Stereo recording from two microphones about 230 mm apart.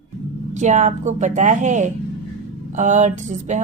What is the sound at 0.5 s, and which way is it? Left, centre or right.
Speech, right.